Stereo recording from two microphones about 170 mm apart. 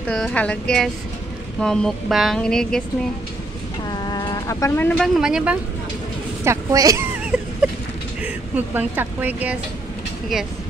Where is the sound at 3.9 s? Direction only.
25° left (ahead or behind).